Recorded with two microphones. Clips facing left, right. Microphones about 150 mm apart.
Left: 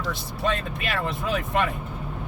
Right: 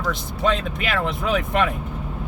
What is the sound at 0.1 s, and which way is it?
Speech, 90° right.